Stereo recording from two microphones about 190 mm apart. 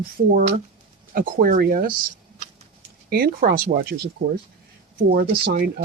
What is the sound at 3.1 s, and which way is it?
Speech, 50° right (ahead or behind).